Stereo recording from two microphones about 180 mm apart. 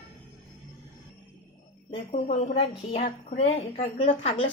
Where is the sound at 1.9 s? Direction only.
40° left (ahead or behind).